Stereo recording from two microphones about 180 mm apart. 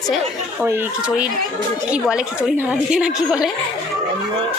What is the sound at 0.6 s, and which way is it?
A woman's voice, 10° right (ahead or behind).